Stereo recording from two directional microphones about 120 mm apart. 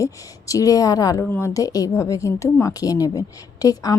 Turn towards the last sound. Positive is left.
turn(degrees=30)  # may be behind; listen again after turning